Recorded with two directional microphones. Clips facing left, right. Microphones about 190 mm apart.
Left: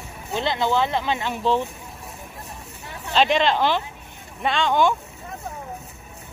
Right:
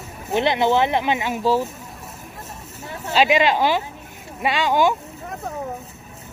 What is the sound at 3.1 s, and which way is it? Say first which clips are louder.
Speech: right 2 dB; 5° right (ahead or behind).